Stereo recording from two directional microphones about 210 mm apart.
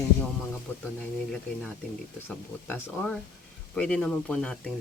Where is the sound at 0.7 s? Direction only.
10° left (ahead or behind).